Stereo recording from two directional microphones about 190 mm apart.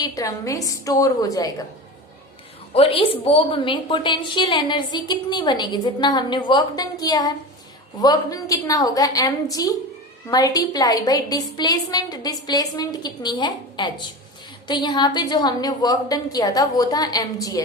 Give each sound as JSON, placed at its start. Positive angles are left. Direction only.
{"t": 0.0, "sound": "a woman's voice", "side_deg": 15}
{"t": 2.7, "sound": "a woman's voice", "side_deg": 30}